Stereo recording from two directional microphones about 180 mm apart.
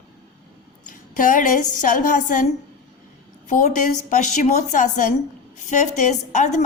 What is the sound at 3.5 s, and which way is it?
A woman's voice, 45° left (ahead or behind).